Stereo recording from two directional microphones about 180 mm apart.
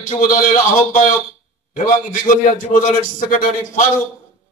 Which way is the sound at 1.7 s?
50° left (ahead or behind).